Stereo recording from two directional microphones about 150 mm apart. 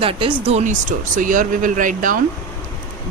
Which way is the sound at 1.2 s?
60° right (ahead or behind).